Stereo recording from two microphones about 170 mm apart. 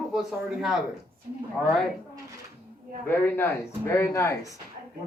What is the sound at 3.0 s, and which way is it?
Speech, 10° left (ahead or behind).